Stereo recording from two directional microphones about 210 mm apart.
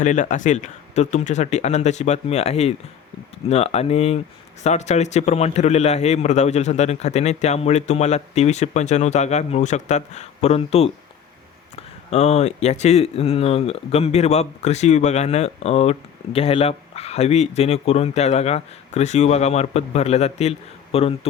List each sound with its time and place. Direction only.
0.0 s speech: 35° left (ahead or behind)